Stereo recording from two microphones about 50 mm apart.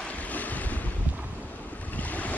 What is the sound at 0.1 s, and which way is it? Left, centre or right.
Waves, left.